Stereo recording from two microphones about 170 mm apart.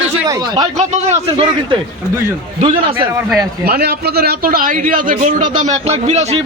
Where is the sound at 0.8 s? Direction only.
35° right (ahead or behind).